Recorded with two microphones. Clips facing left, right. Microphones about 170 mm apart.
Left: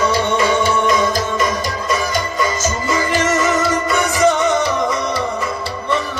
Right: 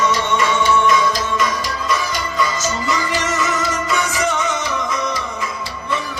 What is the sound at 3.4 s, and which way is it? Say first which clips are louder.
Music: left 4 dB; 35° left (ahead or behind).